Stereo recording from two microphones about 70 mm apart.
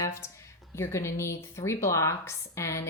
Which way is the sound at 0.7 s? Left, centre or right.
Left.